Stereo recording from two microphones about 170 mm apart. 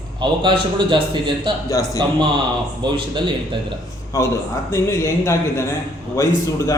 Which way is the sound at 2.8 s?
25° right (ahead or behind).